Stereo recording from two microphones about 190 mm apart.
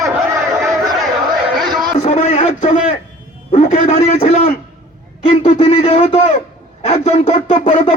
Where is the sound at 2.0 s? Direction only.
40° left (ahead or behind).